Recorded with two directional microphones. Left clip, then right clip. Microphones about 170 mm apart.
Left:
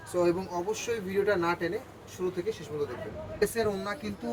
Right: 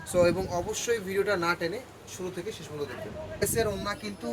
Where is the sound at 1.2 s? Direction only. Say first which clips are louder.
Left 2 dB; 25° right (ahead or behind).